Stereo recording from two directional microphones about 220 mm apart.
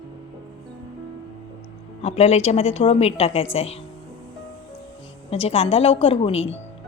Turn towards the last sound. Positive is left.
turn(degrees=25)  # may be behind; listen again after turning